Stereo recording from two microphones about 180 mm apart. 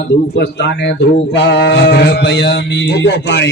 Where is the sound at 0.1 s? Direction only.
70° left (ahead or behind).